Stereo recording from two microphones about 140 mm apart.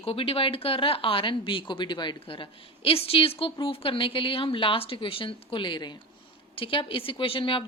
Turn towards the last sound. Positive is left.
turn(degrees=40)  # may be behind; listen again after turning